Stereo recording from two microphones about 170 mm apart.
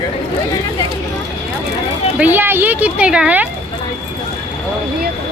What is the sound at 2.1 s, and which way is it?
Speech, 10° right (ahead or behind).